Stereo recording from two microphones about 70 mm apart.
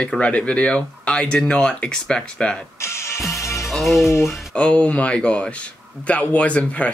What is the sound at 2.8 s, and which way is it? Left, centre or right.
Music, left.